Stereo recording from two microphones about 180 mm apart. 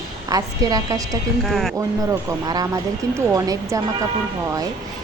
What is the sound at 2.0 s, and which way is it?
Speech, 20° right (ahead or behind).